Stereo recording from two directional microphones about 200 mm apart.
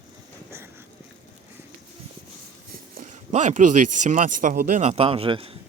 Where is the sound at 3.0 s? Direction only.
40° right (ahead or behind).